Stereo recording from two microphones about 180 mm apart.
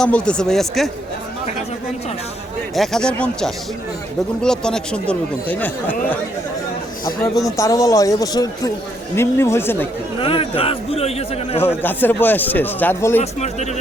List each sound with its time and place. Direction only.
0.0 s speech: 5° left (ahead or behind)
2.7 s speech: centre (ahead or behind)
7.0 s a man's voice: 20° left (ahead or behind)
10.2 s speech: 30° left (ahead or behind)
11.8 s speech: 10° left (ahead or behind)